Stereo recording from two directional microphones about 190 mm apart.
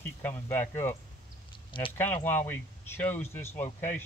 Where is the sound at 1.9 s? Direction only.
10° left (ahead or behind).